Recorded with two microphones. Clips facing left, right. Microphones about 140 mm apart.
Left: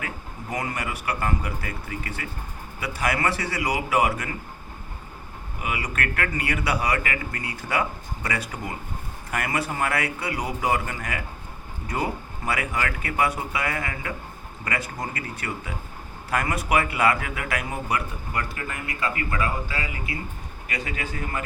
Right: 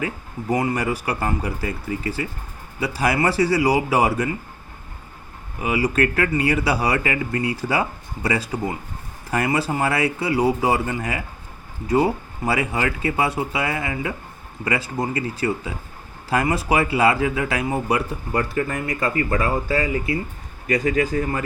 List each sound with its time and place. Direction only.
0.5 s speech: 30° right (ahead or behind)
5.6 s speech: 30° right (ahead or behind)